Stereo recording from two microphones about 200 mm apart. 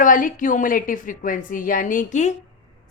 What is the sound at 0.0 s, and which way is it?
A woman's voice, 40° left (ahead or behind).